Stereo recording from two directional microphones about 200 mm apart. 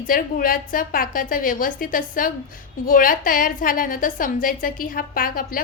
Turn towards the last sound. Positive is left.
turn(degrees=45)  # may be behind; listen again after turning